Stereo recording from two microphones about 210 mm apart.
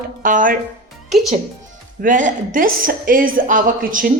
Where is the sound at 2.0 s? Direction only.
40° right (ahead or behind).